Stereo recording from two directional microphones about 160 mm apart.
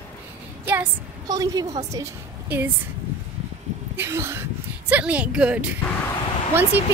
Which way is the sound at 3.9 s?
15° right (ahead or behind).